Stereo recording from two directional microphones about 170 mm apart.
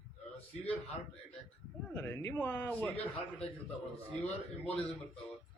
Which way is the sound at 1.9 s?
15° left (ahead or behind).